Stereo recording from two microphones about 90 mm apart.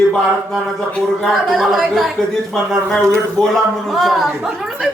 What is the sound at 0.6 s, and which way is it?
A man's voice, centre (ahead or behind).